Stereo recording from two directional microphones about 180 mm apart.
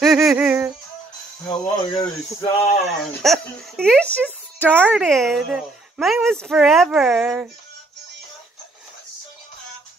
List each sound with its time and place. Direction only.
0.0 s a sound: centre (ahead or behind)
1.5 s speech: 20° left (ahead or behind)
2.8 s speech: centre (ahead or behind)